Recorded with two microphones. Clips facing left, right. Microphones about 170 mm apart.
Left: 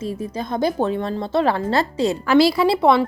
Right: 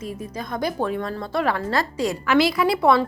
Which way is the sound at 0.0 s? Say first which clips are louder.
Left 5 dB; 30° left (ahead or behind).